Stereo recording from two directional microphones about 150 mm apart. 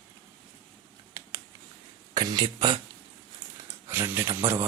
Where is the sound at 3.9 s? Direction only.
15° right (ahead or behind).